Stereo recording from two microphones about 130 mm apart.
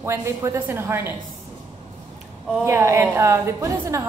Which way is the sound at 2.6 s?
20° right (ahead or behind).